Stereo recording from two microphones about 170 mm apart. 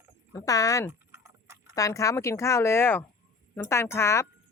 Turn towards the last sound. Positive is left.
turn(degrees=15)  # may be behind; listen again after turning